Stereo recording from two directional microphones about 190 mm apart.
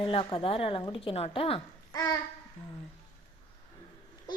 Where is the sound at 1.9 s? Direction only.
20° left (ahead or behind).